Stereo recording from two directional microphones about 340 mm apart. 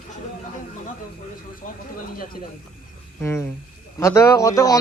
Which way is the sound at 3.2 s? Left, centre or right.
Centre.